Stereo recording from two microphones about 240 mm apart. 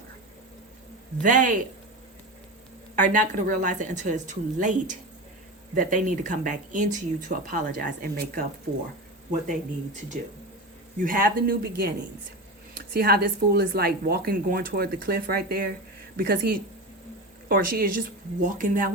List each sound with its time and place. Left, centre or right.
1.2 s speech: right
2.9 s speech: right
9.5 s speech: right